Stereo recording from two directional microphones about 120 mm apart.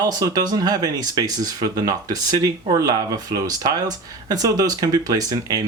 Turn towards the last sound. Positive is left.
turn(degrees=-30)  # may be behind; listen again after turning